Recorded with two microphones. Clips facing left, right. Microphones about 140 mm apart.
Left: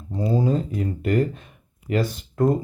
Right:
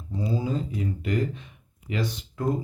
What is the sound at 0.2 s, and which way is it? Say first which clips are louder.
Speech: left 6 dB; 50° left (ahead or behind).